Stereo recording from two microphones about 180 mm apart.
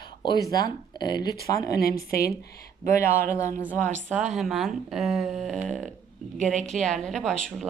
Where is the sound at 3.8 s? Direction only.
40° right (ahead or behind).